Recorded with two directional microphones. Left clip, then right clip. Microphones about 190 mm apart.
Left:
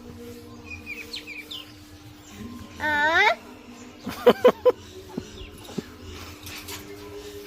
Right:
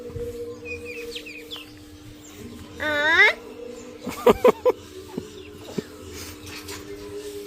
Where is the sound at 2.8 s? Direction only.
10° left (ahead or behind).